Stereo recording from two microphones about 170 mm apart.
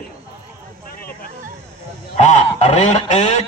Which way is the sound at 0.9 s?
60° left (ahead or behind).